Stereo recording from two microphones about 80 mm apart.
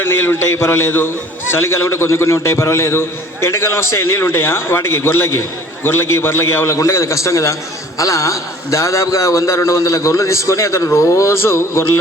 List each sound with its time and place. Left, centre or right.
0.0 s a man's voice: left